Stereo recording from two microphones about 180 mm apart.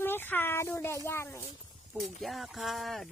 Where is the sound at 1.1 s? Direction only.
15° left (ahead or behind).